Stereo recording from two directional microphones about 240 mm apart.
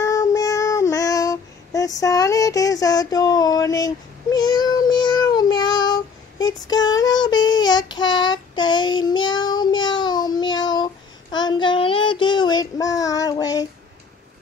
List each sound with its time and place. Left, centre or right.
0.0 s child singing: centre